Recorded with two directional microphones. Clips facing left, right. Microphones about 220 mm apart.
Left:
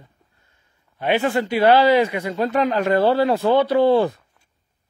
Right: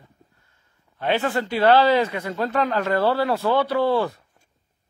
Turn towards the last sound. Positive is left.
turn(degrees=20)  # may be behind; listen again after turning